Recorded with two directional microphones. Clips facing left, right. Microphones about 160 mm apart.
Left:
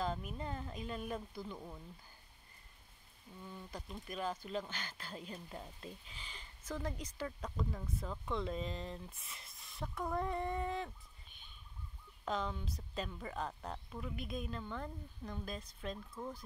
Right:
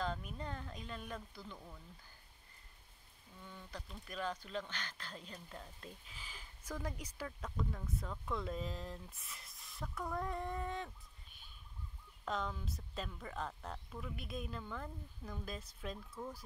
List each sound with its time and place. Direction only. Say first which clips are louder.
0.0 s speech: left 2 dB; 5° left (ahead or behind)
4.1 s speech: left 2 dB; 10° left (ahead or behind)
6.0 s speech: left 1 dB; 5° right (ahead or behind)
7.2 s speech: left 1 dB; 5° left (ahead or behind)
12.3 s speech: left 2 dB; centre (ahead or behind)